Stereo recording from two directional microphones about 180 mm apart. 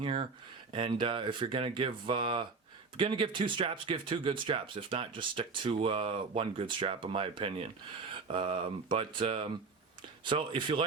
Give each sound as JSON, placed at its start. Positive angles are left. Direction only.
{"t": 0.0, "sound": "speech", "side_deg": -30}